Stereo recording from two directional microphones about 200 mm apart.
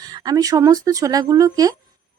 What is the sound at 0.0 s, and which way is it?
Speech, 20° right (ahead or behind).